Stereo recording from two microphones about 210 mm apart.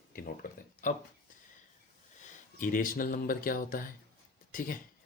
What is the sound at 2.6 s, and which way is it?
Speech, 40° left (ahead or behind).